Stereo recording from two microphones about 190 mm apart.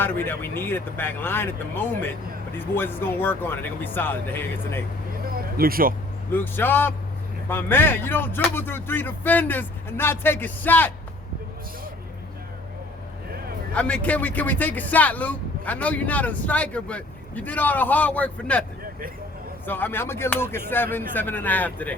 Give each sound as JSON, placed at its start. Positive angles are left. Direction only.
{"t": 0.0, "sound": "speech", "side_deg": 10}
{"t": 5.2, "sound": "a sound", "side_deg": -50}
{"t": 6.3, "sound": "speech", "side_deg": 10}
{"t": 13.7, "sound": "speech", "side_deg": 5}
{"t": 19.6, "sound": "speech", "side_deg": 10}